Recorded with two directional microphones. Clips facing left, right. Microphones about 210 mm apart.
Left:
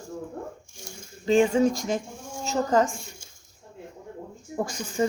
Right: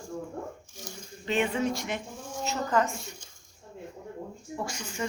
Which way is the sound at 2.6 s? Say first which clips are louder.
Left 5 dB; 40° left (ahead or behind).